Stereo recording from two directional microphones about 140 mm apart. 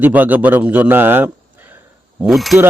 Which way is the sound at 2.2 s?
Centre (ahead or behind).